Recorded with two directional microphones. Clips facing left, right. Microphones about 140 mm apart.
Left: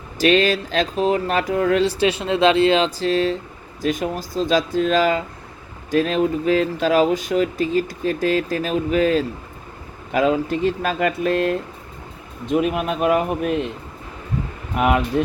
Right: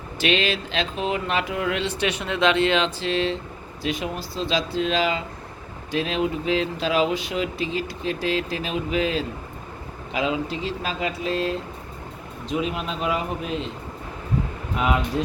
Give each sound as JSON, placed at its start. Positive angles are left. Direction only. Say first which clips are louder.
{"t": 0.2, "sound": "speech", "louder": "left 7 dB", "side_deg": 40}
{"t": 14.8, "sound": "speech", "louder": "left 5 dB", "side_deg": 55}